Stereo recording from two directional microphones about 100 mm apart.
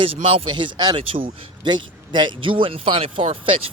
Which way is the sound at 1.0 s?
65° right (ahead or behind).